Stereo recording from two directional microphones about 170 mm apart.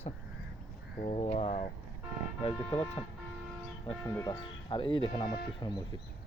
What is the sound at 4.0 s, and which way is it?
Speech, 20° left (ahead or behind).